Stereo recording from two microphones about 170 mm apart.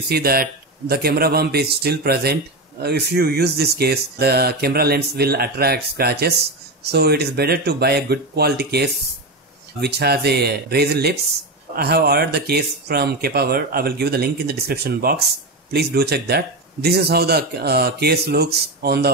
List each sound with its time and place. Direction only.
0.1 s speech: 65° right (ahead or behind)